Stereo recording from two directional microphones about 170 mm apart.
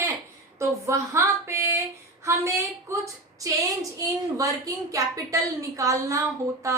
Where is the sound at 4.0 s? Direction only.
20° right (ahead or behind).